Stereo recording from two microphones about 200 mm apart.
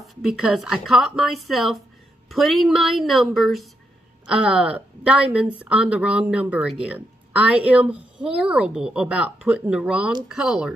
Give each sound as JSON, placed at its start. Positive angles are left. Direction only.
{"t": 0.0, "sound": "a woman's voice", "side_deg": 0}